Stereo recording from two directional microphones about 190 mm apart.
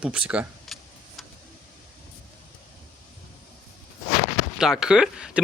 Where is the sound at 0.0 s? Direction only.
5° right (ahead or behind).